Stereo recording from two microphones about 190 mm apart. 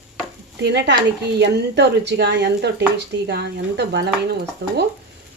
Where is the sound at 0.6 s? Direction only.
65° right (ahead or behind).